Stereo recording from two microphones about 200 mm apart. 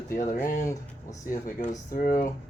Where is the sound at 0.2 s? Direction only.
40° left (ahead or behind).